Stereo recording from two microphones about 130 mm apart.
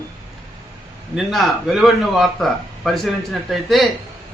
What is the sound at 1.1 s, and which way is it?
Speech, centre (ahead or behind).